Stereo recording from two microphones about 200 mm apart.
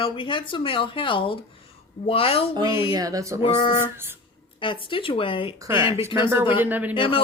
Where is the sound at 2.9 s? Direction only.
15° right (ahead or behind).